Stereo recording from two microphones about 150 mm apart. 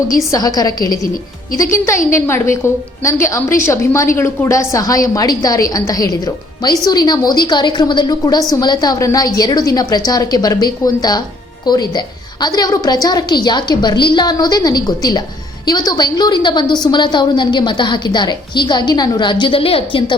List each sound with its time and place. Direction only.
0.3 s a woman's voice: 25° left (ahead or behind)
2.0 s a woman's voice: 15° left (ahead or behind); by 20.1 s 35° left (ahead or behind)